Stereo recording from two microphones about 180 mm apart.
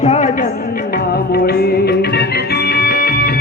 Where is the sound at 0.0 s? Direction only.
40° left (ahead or behind).